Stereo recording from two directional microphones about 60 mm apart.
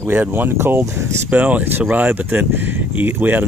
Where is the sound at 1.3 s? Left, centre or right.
Right.